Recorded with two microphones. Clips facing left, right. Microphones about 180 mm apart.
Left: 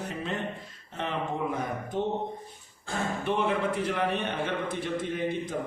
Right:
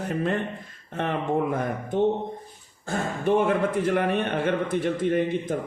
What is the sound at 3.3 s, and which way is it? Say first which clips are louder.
A man's voice: right 7 dB; 50° right (ahead or behind).